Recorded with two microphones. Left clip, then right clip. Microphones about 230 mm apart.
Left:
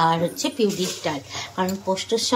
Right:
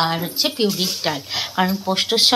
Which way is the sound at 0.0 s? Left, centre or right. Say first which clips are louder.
Even; centre.